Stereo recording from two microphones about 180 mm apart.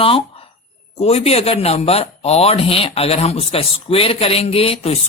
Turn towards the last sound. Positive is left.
turn(degrees=35)  # may be behind; listen again after turning